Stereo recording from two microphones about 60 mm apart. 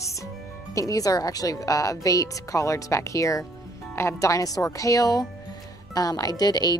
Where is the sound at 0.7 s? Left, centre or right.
Left.